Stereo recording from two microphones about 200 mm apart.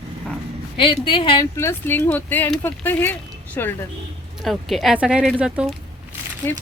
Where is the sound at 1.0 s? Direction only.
25° left (ahead or behind).